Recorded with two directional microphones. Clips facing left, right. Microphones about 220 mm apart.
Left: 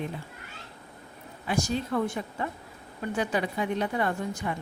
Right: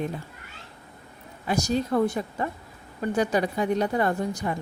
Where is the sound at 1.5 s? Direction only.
40° right (ahead or behind).